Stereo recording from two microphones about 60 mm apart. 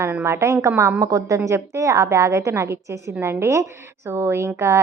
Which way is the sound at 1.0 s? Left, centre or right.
Right.